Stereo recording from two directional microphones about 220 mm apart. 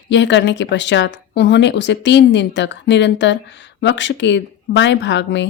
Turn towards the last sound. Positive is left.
turn(degrees=55)  # may be behind; listen again after turning